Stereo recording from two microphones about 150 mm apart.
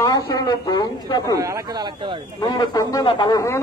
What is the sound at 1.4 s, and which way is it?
Speech, 25° right (ahead or behind).